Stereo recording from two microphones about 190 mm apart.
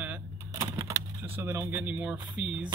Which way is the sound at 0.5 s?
15° right (ahead or behind).